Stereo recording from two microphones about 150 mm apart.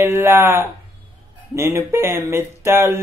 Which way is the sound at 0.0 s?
15° right (ahead or behind).